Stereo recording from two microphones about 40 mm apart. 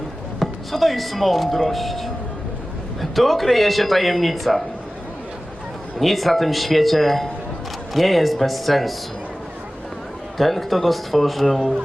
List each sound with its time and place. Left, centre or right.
0.3 s a man's voice: centre
6.0 s a man's voice: centre
10.3 s a man's voice: centre